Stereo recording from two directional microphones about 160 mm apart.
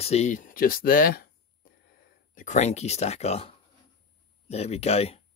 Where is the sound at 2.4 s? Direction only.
50° left (ahead or behind).